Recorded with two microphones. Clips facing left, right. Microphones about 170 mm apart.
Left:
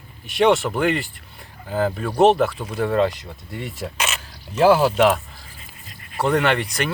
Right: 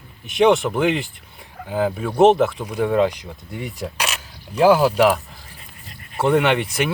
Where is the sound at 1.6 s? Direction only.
5° right (ahead or behind).